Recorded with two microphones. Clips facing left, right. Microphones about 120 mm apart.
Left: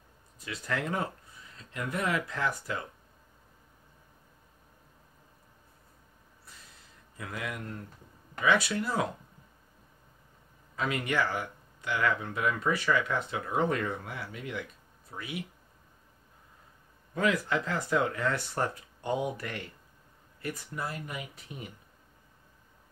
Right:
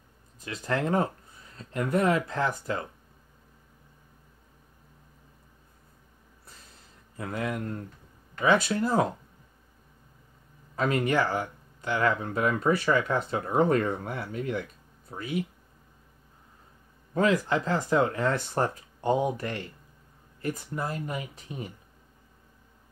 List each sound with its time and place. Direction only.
0.5 s speech: 40° right (ahead or behind)
7.2 s speech: 35° right (ahead or behind)
11.1 s speech: 30° right (ahead or behind)
17.3 s speech: 30° right (ahead or behind)
20.8 s speech: 35° right (ahead or behind)